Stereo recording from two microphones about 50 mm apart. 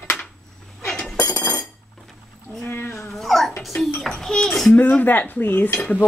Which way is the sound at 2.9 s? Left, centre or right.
Centre.